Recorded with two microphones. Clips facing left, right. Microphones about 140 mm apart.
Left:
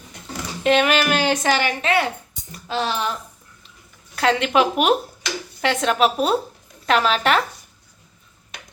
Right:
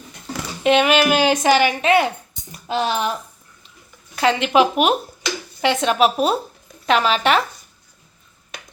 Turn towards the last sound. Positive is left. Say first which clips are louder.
# right 1 dB
turn(degrees=0)  # may be behind; listen again after turning